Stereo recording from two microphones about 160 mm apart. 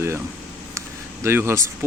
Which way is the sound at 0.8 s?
15° right (ahead or behind).